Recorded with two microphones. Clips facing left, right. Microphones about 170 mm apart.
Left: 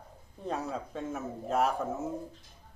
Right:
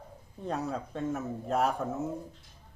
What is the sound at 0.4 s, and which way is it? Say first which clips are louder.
Speech: right 1 dB; centre (ahead or behind).